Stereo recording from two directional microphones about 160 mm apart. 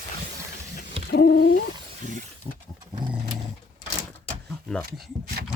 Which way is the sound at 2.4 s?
40° left (ahead or behind).